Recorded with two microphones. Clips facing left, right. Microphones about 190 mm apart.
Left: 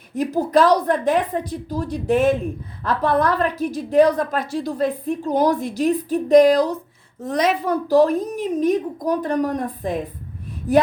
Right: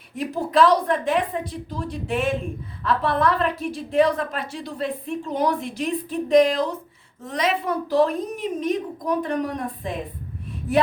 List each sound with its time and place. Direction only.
0.2 s a woman's voice: 40° left (ahead or behind)